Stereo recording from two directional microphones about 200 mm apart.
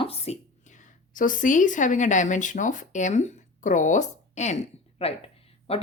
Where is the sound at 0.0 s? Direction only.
30° left (ahead or behind).